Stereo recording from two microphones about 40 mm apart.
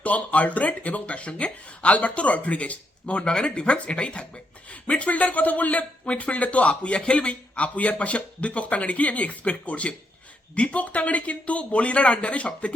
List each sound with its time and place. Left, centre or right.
0.0 s speech: left